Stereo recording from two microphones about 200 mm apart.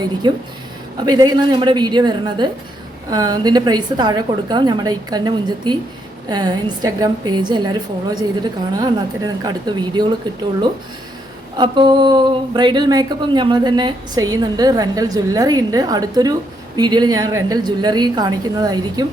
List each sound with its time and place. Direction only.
0.2 s speech: 20° right (ahead or behind)
11.5 s speech: 20° right (ahead or behind)